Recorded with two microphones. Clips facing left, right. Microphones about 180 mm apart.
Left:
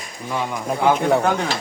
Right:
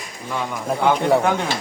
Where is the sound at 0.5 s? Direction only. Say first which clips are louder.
Even; centre (ahead or behind).